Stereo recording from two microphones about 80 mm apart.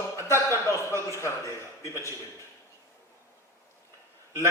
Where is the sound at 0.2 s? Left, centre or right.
Left.